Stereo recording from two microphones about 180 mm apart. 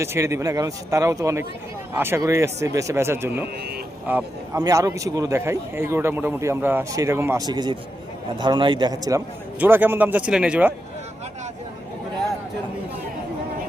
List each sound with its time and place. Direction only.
0.0 s a man's voice: 15° right (ahead or behind)
4.5 s a man's voice: 20° right (ahead or behind)